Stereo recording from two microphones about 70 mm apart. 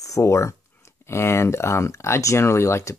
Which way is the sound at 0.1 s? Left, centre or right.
Left.